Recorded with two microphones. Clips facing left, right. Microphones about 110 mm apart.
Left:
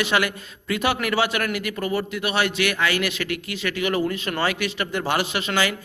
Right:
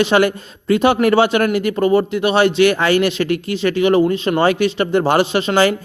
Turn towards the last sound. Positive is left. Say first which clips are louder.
# right 9 dB
turn(degrees=-35)  # may be behind; listen again after turning